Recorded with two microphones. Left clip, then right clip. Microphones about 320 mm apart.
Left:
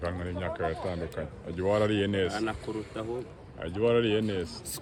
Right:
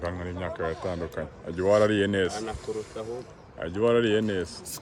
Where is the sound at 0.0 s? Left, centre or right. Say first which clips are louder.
Right 1 dB; right.